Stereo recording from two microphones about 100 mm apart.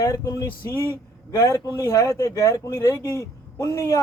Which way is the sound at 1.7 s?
30° left (ahead or behind).